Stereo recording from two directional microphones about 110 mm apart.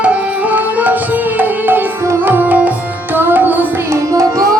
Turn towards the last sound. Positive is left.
turn(degrees=-30)  # may be behind; listen again after turning